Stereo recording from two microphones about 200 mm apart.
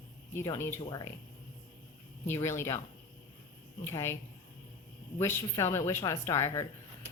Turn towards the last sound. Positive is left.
turn(degrees=15)  # may be behind; listen again after turning